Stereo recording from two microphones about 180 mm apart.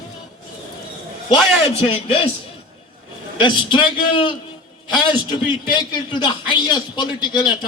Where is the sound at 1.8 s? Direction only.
30° left (ahead or behind).